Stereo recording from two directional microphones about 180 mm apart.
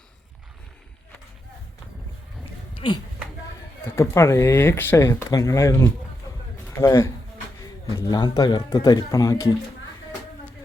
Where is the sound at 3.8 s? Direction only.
15° left (ahead or behind).